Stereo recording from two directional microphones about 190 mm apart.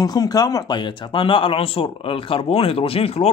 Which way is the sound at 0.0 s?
20° left (ahead or behind).